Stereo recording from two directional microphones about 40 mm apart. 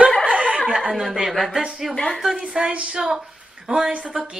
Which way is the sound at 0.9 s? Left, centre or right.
Centre.